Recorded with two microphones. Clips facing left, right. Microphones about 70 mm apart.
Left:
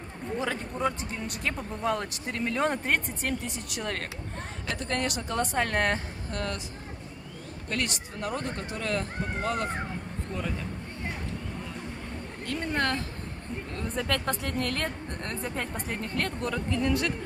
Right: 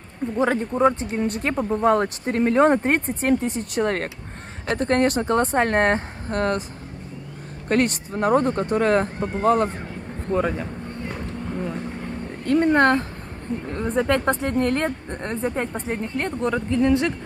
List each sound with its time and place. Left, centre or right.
0.4 s speech: right
7.6 s speech: right
10.3 s a sound: right
12.4 s speech: right